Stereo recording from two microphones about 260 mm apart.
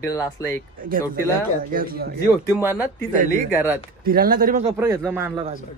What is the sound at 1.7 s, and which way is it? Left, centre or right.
Speech, right.